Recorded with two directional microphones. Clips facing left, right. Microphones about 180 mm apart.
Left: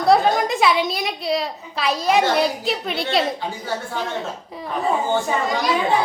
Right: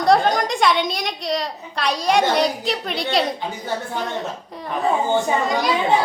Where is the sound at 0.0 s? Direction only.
5° left (ahead or behind).